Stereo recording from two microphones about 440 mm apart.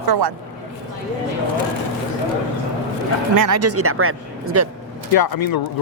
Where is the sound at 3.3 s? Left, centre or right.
Right.